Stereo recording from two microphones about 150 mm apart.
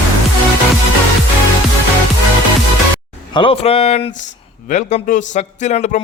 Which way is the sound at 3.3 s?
40° left (ahead or behind).